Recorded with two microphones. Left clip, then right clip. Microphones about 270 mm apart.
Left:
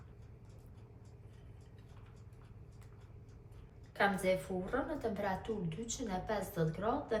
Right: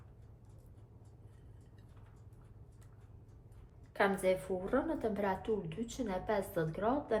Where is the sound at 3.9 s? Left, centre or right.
Right.